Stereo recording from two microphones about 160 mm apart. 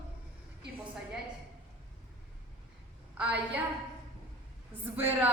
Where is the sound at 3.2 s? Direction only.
10° right (ahead or behind).